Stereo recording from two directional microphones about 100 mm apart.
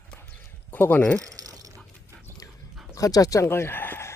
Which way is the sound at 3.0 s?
35° left (ahead or behind).